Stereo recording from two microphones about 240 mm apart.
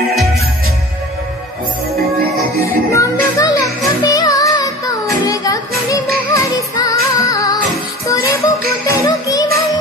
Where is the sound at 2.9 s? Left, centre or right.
Centre.